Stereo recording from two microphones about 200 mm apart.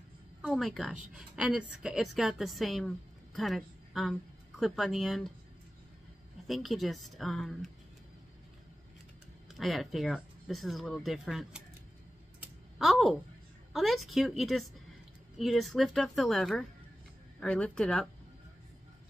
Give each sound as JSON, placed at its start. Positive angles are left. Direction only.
{"t": 0.4, "sound": "a woman's voice", "side_deg": 0}
{"t": 6.4, "sound": "a woman's voice", "side_deg": 0}
{"t": 9.5, "sound": "a woman's voice", "side_deg": 0}
{"t": 12.7, "sound": "a woman's voice", "side_deg": 0}